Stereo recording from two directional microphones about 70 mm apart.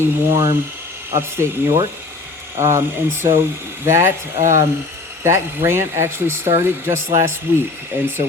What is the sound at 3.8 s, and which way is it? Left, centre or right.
Speech, right.